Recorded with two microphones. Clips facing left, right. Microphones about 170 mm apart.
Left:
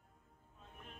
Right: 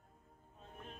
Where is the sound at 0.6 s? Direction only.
35° right (ahead or behind).